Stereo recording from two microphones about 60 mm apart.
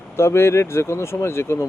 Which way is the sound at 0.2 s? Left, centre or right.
Left.